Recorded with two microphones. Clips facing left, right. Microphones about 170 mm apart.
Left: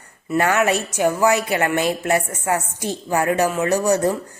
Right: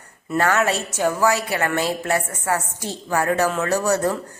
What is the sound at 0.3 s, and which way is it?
A woman's voice, 15° left (ahead or behind).